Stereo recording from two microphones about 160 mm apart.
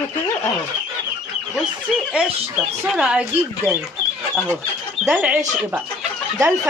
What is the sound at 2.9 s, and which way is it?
Speech, 5° right (ahead or behind).